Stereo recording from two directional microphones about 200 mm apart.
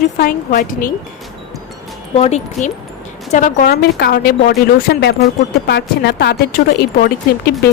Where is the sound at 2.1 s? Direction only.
30° left (ahead or behind); by 7.5 s 50° left (ahead or behind).